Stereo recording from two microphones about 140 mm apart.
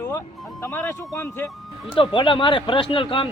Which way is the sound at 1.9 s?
35° left (ahead or behind).